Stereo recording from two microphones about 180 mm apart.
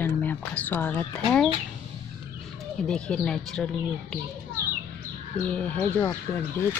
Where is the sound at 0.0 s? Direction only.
10° left (ahead or behind).